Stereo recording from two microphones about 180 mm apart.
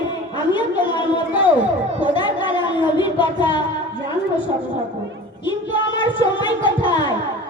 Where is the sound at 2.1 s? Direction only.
25° left (ahead or behind).